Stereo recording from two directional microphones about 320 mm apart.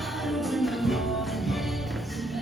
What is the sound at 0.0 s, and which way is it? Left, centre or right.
Music, centre.